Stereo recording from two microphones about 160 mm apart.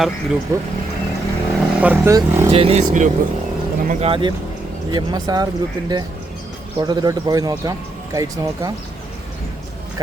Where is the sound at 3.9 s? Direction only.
40° right (ahead or behind).